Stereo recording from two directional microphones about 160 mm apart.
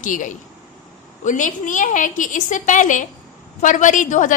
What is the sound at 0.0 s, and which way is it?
A woman's voice, 55° left (ahead or behind).